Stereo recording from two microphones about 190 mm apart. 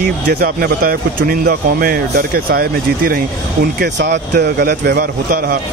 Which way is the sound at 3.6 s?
60° right (ahead or behind).